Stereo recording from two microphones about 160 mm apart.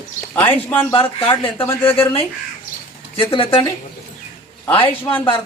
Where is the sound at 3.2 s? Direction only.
35° left (ahead or behind).